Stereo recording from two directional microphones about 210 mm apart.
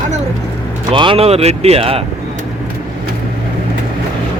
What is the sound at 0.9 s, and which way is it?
Speech, 25° right (ahead or behind).